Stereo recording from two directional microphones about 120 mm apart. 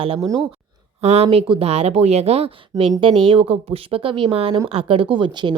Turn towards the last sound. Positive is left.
turn(degrees=-40)  # may be behind; listen again after turning